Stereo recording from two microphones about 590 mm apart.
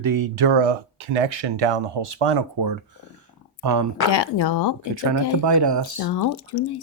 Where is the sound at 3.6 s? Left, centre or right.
Right.